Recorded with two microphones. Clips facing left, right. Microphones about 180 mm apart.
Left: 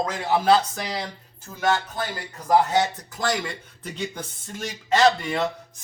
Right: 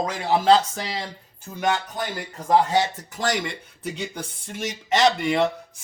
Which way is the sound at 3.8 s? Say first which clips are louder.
Right 1 dB; 10° right (ahead or behind).